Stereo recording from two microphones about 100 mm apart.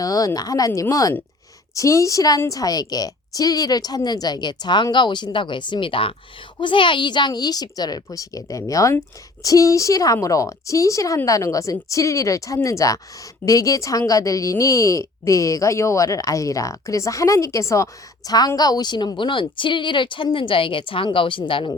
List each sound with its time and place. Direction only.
0.0 s a woman's voice: 35° left (ahead or behind); by 21.7 s 60° left (ahead or behind)